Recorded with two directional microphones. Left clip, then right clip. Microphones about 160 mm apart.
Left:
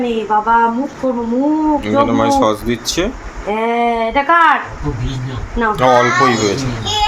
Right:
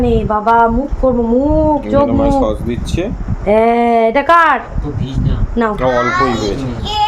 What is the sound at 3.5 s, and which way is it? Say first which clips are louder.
Speech: right 5 dB; 75° right (ahead or behind).